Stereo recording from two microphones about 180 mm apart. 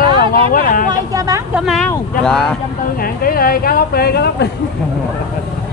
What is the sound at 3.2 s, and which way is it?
Speech, 55° left (ahead or behind).